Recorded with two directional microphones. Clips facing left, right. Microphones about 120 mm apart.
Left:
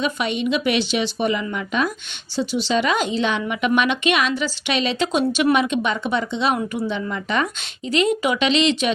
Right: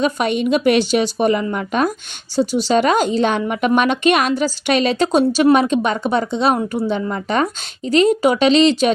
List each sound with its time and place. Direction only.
0.0 s a woman's voice: 45° right (ahead or behind)